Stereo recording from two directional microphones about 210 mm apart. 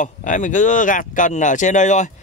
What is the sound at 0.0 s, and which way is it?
Speech, 35° left (ahead or behind).